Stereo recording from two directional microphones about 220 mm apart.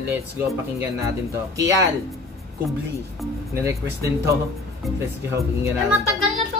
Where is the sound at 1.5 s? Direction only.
15° right (ahead or behind).